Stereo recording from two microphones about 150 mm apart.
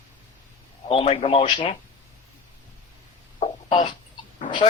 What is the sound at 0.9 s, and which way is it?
Speech, 40° left (ahead or behind).